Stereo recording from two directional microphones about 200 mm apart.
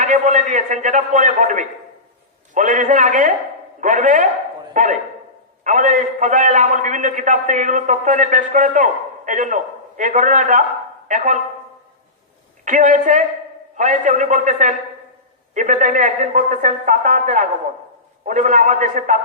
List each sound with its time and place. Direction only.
0.0 s a man's voice: 40° right (ahead or behind)
12.6 s a man's voice: 40° right (ahead or behind)